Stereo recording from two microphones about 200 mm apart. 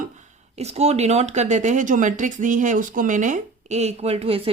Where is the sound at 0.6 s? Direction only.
30° right (ahead or behind).